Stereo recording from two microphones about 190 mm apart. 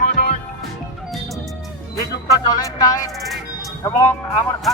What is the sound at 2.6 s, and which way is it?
Speech, 15° left (ahead or behind).